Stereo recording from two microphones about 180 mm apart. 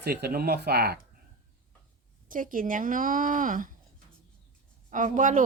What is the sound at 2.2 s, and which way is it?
Speech, 50° right (ahead or behind).